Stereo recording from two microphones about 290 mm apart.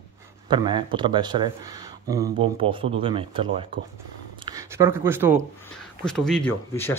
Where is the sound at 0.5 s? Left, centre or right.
Centre.